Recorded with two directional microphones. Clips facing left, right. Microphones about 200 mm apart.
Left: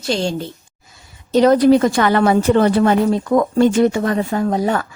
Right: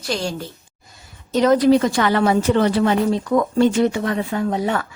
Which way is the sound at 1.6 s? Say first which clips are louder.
Left 3 dB; 50° left (ahead or behind).